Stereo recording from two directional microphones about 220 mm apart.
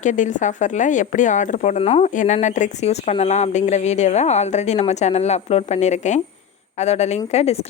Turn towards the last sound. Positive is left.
turn(degrees=30)  # may be behind; listen again after turning